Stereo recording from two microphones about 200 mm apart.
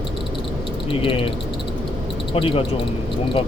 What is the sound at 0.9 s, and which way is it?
Speech, 25° left (ahead or behind).